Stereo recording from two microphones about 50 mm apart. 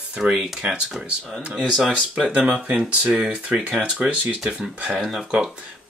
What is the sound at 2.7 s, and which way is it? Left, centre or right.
Speech, right.